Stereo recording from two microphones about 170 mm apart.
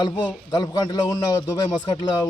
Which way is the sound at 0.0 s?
25° left (ahead or behind).